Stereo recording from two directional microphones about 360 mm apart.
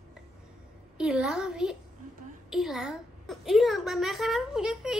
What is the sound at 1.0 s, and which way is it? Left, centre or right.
A woman's voice, centre.